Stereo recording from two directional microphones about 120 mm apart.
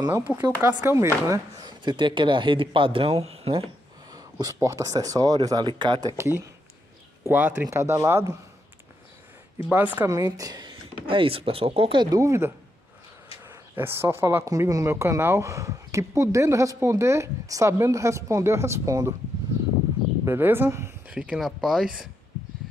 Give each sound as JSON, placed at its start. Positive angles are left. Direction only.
{"t": 0.3, "sound": "speech", "side_deg": -15}
{"t": 4.1, "sound": "a sound", "side_deg": -30}
{"t": 4.6, "sound": "speech", "side_deg": -25}
{"t": 6.1, "sound": "speech", "side_deg": -20}
{"t": 9.7, "sound": "speech", "side_deg": -15}
{"t": 10.0, "sound": "speech", "side_deg": -30}
{"t": 12.2, "sound": "speech", "side_deg": -25}
{"t": 20.2, "sound": "speech", "side_deg": -20}
{"t": 21.1, "sound": "speech", "side_deg": -10}